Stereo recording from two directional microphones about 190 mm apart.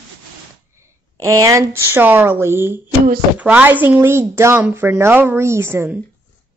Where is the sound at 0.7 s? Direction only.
15° right (ahead or behind).